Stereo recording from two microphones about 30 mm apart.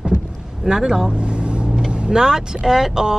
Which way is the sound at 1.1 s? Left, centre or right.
Right.